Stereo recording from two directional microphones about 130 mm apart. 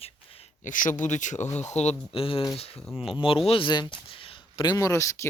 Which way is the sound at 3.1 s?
45° left (ahead or behind).